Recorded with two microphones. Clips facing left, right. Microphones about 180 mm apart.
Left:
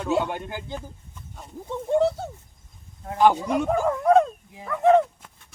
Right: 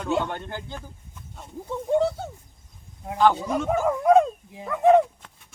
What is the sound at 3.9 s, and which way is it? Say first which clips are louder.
Speech: right 1 dB; 10° right (ahead or behind).